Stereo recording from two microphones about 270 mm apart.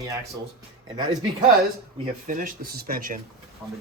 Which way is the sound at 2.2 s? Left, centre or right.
Right.